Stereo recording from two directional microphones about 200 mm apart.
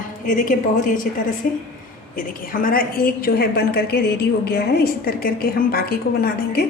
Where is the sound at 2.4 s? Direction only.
45° left (ahead or behind).